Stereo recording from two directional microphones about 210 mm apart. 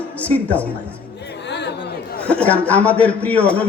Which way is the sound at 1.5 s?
55° left (ahead or behind).